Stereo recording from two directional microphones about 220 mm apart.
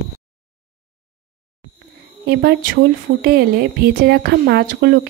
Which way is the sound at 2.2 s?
45° right (ahead or behind).